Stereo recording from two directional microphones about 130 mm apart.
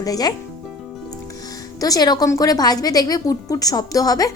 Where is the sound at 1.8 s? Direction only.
30° left (ahead or behind).